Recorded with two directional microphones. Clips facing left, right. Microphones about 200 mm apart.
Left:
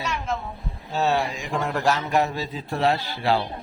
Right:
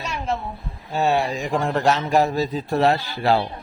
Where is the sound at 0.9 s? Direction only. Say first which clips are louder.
Right 2 dB; 15° right (ahead or behind).